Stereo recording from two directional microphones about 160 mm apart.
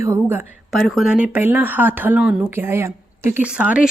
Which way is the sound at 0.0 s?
15° right (ahead or behind).